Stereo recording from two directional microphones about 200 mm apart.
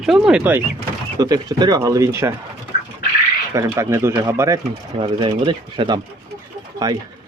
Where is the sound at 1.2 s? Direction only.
20° right (ahead or behind).